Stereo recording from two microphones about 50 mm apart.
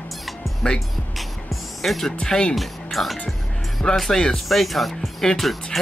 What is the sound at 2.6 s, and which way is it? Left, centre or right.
Speech, centre.